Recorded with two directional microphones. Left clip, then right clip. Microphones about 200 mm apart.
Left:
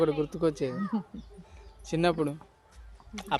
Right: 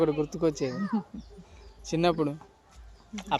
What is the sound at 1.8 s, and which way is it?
Speech, 5° right (ahead or behind).